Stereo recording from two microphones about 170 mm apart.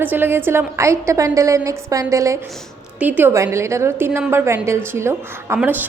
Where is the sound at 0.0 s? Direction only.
10° right (ahead or behind).